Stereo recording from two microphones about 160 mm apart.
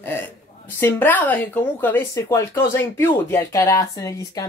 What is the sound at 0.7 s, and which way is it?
Speech, 15° left (ahead or behind).